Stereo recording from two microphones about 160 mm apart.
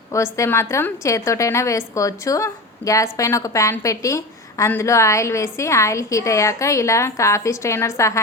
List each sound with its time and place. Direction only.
0.1 s a woman's voice: 20° left (ahead or behind)